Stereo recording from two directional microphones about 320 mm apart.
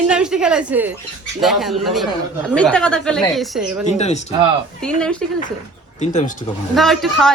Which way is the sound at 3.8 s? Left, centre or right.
Left.